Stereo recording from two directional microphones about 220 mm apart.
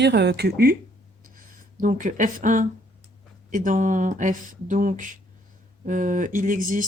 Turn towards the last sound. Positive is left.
turn(degrees=-35)  # may be behind; listen again after turning